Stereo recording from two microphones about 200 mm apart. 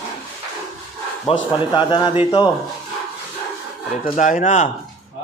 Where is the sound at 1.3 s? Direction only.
25° left (ahead or behind).